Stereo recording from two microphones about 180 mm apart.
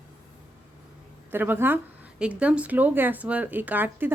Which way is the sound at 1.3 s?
10° right (ahead or behind).